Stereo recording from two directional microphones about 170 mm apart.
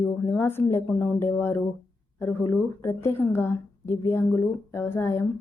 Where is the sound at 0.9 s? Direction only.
10° left (ahead or behind).